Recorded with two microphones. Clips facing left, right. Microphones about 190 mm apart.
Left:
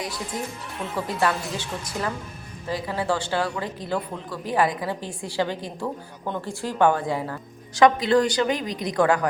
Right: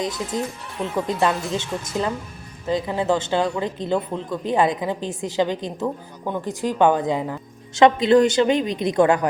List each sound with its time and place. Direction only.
0.9 s speech: 20° right (ahead or behind)